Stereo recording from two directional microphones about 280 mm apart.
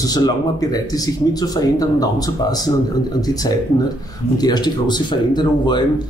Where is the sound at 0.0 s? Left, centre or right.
Centre.